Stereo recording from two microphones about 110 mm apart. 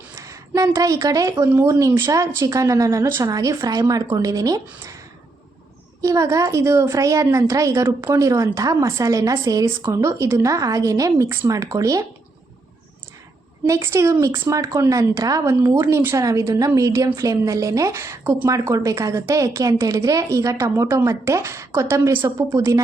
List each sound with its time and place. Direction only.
0.2 s a woman's voice: 30° right (ahead or behind)
6.0 s a woman's voice: 30° right (ahead or behind)
13.7 s a woman's voice: 25° right (ahead or behind)
22.5 s a woman's voice: 30° right (ahead or behind)